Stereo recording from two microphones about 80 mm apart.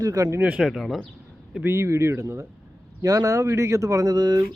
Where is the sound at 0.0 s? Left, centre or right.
Right.